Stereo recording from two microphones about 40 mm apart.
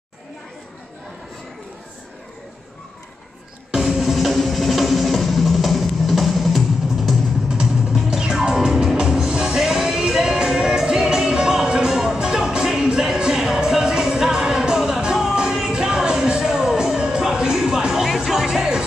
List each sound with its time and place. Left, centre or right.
3.7 s music: centre
7.4 s music: centre
18.0 s music: centre